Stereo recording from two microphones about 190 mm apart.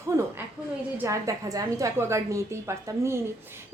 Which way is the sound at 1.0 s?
15° right (ahead or behind).